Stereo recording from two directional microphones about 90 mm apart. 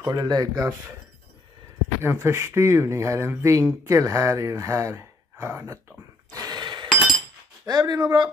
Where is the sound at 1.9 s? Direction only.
30° right (ahead or behind).